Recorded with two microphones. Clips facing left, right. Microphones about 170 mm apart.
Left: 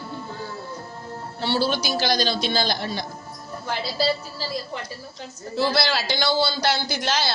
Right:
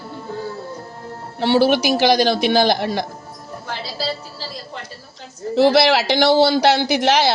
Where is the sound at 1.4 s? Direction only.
75° right (ahead or behind).